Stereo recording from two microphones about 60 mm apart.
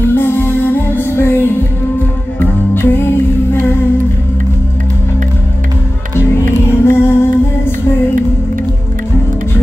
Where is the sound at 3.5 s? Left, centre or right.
Left.